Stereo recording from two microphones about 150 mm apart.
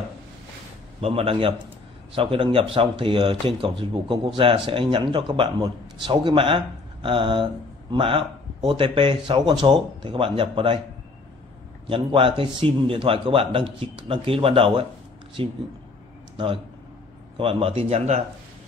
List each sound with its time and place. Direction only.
1.0 s a man's voice: 40° right (ahead or behind)
11.9 s a man's voice: 35° right (ahead or behind)
17.4 s a man's voice: 35° right (ahead or behind)